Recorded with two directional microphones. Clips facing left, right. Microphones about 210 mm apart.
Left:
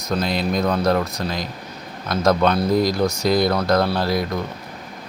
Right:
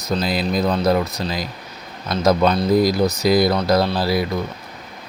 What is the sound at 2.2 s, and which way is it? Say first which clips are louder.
Speech: right 1 dB; 5° right (ahead or behind).